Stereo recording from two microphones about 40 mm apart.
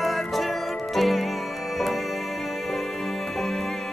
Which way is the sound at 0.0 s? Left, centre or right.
Centre.